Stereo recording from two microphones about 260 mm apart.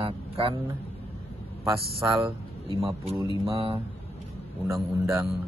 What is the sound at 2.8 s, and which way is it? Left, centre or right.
A man's voice, right.